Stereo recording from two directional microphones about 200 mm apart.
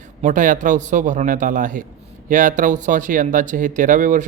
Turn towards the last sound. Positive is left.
turn(degrees=-40)  # may be behind; listen again after turning